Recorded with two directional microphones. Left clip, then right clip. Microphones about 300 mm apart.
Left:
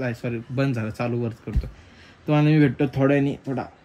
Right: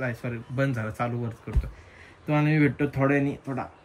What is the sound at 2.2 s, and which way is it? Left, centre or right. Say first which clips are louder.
A man's voice: left 4 dB; centre.